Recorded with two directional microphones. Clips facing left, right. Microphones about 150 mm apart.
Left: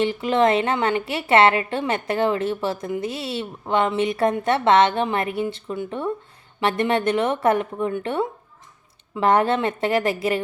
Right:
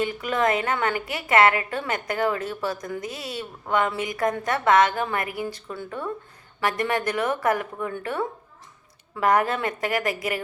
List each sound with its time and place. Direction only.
0.0 s a woman's voice: 25° left (ahead or behind)